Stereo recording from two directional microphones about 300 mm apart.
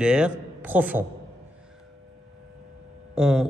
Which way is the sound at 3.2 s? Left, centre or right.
Centre.